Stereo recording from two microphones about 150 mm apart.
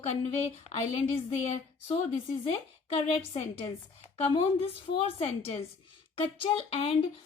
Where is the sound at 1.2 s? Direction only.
50° left (ahead or behind).